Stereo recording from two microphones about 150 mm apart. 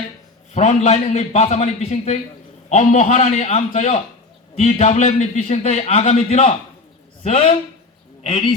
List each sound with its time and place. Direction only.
0.5 s a man's voice: 50° left (ahead or behind)